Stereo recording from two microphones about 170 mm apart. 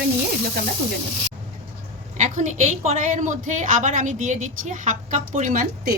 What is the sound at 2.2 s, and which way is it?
A woman's voice, 45° right (ahead or behind).